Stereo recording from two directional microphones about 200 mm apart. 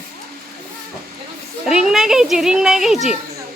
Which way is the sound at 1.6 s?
5° right (ahead or behind).